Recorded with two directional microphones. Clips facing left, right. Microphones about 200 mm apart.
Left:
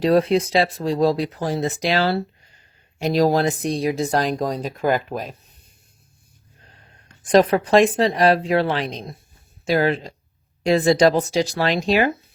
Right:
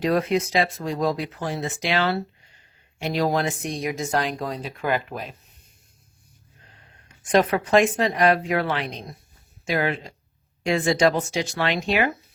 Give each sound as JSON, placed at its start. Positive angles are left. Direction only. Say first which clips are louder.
{"t": 0.0, "sound": "speech", "louder": "left 5 dB", "side_deg": 30}
{"t": 7.3, "sound": "speech", "louder": "left 4 dB", "side_deg": 35}